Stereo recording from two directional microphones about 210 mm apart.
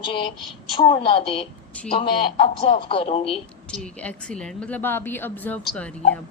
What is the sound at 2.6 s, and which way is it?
Speech, 25° left (ahead or behind).